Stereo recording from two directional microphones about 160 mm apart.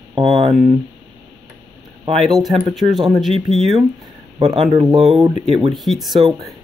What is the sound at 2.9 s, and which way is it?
Speech, 25° right (ahead or behind).